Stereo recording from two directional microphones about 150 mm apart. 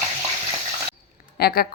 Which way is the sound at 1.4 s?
85° left.